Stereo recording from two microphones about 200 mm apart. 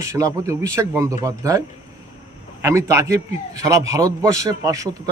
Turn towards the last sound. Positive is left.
turn(degrees=-15)  # may be behind; listen again after turning